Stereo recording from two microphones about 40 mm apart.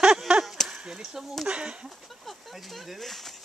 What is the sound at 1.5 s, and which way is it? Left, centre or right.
Chicken, right.